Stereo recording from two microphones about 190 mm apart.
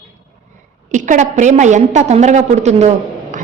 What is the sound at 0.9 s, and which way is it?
A woman's voice, 40° right (ahead or behind).